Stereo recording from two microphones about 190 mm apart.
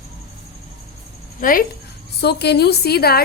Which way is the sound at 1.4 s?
45° left (ahead or behind).